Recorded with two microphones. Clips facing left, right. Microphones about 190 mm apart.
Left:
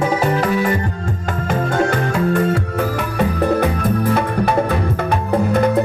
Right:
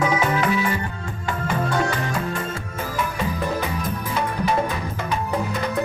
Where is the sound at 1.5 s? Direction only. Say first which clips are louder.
Left 5 dB; 50° left (ahead or behind).